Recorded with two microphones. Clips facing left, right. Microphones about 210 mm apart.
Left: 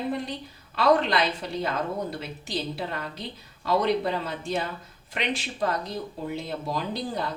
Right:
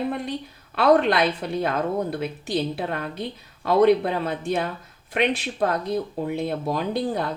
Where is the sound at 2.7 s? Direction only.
55° right (ahead or behind).